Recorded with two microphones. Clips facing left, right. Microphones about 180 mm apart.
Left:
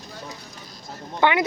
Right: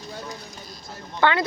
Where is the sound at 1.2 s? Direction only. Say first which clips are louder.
Left 1 dB; 15° left (ahead or behind).